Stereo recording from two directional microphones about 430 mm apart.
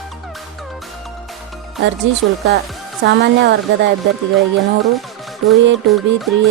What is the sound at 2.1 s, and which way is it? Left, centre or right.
Music, right.